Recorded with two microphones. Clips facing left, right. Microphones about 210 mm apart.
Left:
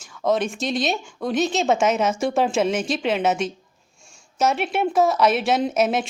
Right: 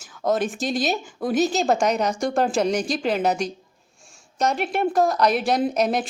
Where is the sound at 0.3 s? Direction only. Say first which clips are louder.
Left 1 dB; centre (ahead or behind).